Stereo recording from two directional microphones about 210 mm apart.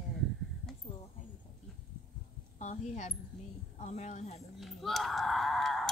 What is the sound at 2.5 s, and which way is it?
A woman's voice, 35° left (ahead or behind).